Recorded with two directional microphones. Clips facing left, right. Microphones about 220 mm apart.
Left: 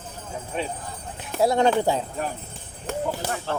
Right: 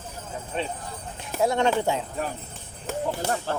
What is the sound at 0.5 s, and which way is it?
Speech, 10° left (ahead or behind).